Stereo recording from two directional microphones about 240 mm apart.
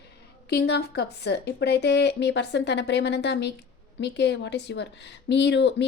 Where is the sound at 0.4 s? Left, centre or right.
Left.